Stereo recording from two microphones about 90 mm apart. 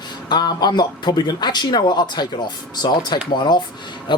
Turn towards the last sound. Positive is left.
turn(degrees=60)  # may be behind; listen again after turning